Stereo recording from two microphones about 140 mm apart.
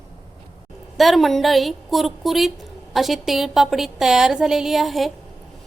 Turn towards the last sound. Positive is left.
turn(degrees=0)  # may be behind; listen again after turning